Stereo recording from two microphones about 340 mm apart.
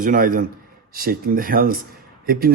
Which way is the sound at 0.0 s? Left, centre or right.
Right.